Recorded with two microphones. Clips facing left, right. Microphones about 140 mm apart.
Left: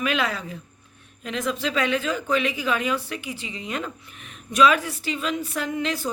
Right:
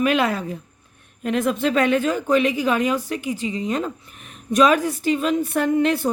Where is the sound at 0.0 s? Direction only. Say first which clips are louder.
Right 6 dB; 50° right (ahead or behind).